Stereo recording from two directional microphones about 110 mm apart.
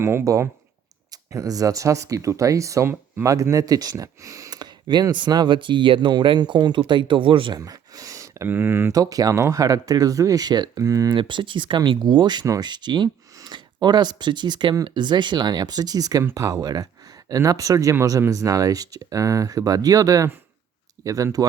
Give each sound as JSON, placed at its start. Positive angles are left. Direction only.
{"t": 0.0, "sound": "speech", "side_deg": -25}
{"t": 7.6, "sound": "a sound", "side_deg": -30}
{"t": 8.4, "sound": "speech", "side_deg": -20}
{"t": 9.0, "sound": "speech", "side_deg": -35}
{"t": 11.2, "sound": "speech", "side_deg": -50}